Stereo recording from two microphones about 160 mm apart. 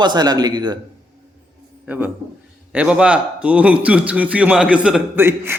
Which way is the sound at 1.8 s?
10° right (ahead or behind).